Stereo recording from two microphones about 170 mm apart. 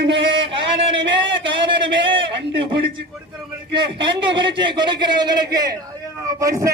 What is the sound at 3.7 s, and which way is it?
A man's voice, 30° right (ahead or behind).